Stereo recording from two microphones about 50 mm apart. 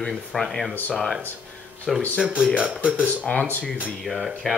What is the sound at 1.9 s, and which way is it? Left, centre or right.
Speech, centre.